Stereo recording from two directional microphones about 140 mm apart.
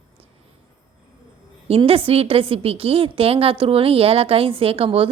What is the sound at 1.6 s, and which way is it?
A woman's voice, 45° right (ahead or behind).